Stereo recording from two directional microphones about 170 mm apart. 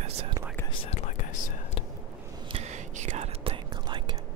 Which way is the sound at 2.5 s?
40° right (ahead or behind).